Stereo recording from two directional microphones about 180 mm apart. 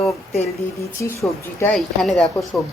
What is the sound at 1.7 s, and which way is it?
Speech, centre (ahead or behind).